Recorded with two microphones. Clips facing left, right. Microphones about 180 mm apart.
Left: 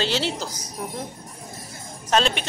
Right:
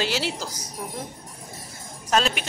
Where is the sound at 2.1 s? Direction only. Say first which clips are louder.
Left 2 dB; 5° right (ahead or behind).